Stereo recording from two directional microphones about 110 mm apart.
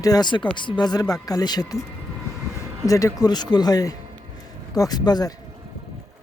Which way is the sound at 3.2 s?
40° left (ahead or behind).